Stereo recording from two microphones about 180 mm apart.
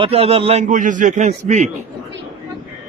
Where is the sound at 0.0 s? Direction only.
35° right (ahead or behind).